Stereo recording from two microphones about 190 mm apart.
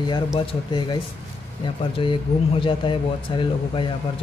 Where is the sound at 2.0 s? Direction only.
25° left (ahead or behind).